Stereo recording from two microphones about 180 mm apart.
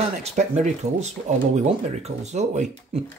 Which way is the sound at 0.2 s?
40° right (ahead or behind).